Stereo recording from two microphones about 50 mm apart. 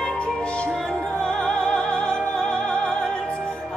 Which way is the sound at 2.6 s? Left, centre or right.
Centre.